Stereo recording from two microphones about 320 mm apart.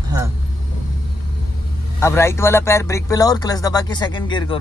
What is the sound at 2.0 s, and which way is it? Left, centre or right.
Speech, centre.